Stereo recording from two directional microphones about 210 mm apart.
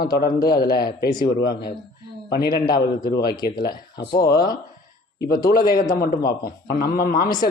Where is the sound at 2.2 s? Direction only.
50° left (ahead or behind).